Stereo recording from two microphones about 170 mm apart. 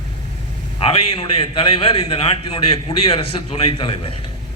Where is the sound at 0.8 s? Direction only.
35° left (ahead or behind).